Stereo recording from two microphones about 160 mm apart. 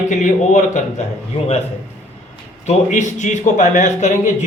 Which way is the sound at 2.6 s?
50° left (ahead or behind).